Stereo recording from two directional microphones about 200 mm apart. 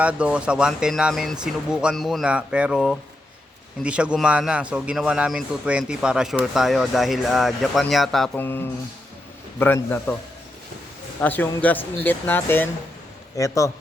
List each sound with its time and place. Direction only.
0.0 s a man's voice: 5° right (ahead or behind); by 10.2 s 10° left (ahead or behind)
11.2 s speech: 10° left (ahead or behind)